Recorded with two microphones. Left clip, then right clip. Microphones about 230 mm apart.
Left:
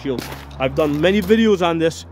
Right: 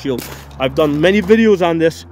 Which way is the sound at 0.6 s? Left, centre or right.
Right.